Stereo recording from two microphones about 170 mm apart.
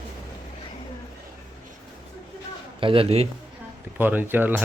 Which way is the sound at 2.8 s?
30° right (ahead or behind).